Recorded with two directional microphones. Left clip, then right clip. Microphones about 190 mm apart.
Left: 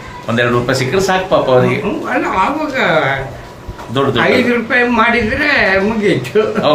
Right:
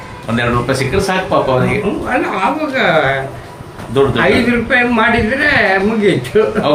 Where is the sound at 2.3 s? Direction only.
Centre (ahead or behind).